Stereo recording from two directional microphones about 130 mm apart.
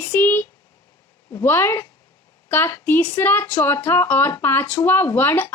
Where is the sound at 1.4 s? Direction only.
20° left (ahead or behind).